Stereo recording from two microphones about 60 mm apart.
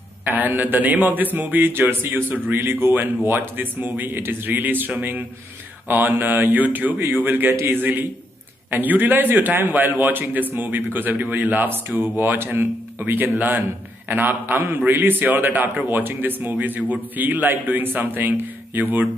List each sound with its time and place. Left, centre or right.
0.3 s a man's voice: right
2.6 s speech: right
3.3 s a man's voice: right